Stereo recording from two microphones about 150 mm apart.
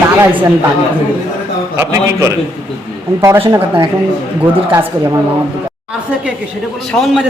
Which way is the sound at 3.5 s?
15° right (ahead or behind).